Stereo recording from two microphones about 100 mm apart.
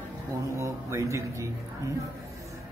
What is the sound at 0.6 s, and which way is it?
Speech, 30° right (ahead or behind).